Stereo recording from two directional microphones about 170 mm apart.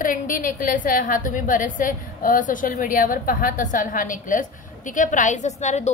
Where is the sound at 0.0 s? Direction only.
50° left (ahead or behind).